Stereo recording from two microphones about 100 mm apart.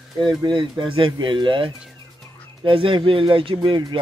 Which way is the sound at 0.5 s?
50° right (ahead or behind).